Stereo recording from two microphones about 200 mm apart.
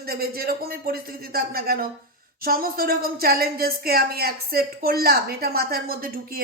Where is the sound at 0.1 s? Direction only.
50° right (ahead or behind).